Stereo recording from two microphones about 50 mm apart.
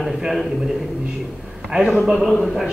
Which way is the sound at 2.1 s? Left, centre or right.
Centre.